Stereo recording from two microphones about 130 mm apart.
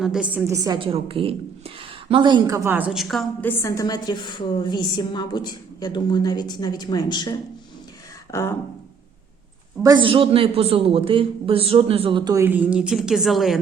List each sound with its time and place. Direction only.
0.0 s a woman's voice: 5° right (ahead or behind)
0.4 s a woman's voice: 25° right (ahead or behind)
0.8 s a man's voice: 45° right (ahead or behind)
2.6 s a woman's voice: 15° right (ahead or behind)
2.9 s a woman's voice: centre (ahead or behind)
3.4 s a woman's voice: 25° left (ahead or behind)
8.3 s a sound: 20° left (ahead or behind)
9.8 s a man's voice: 35° right (ahead or behind)
12.2 s a woman's voice: 25° right (ahead or behind)
12.5 s a woman's voice: 10° right (ahead or behind)